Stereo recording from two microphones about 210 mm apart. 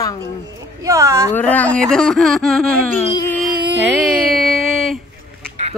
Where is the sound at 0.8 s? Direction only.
15° right (ahead or behind).